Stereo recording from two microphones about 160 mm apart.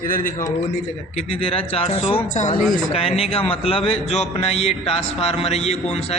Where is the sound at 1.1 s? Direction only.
35° left (ahead or behind).